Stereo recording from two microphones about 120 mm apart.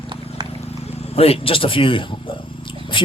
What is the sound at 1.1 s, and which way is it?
Speech, 55° left (ahead or behind).